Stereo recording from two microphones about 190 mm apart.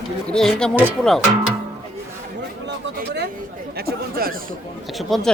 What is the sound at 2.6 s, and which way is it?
Speech, 65° right (ahead or behind).